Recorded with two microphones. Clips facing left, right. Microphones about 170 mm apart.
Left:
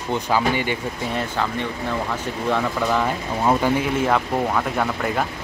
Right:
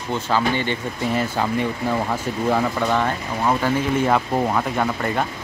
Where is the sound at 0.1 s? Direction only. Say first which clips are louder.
Even; 10° left (ahead or behind).